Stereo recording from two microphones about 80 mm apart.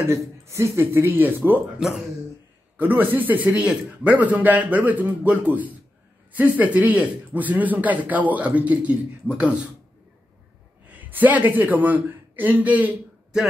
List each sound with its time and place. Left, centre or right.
0.1 s speech: right
1.8 s speech: centre
2.8 s a man's voice: right
10.9 s a man's voice: right